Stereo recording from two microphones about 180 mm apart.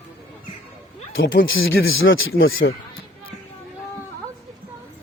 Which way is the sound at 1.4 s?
90° left.